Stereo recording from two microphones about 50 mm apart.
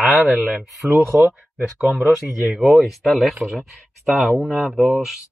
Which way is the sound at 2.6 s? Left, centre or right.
Centre.